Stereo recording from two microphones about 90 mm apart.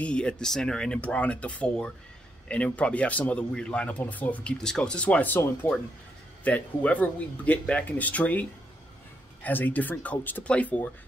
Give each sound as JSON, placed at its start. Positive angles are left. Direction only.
{"t": 0.0, "sound": "speech", "side_deg": 10}